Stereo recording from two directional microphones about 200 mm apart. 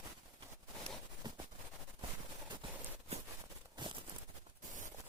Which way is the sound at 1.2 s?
20° right (ahead or behind).